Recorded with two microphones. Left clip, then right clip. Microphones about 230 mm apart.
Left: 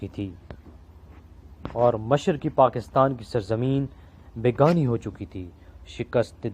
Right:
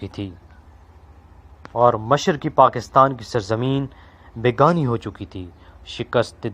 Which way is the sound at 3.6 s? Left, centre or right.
Right.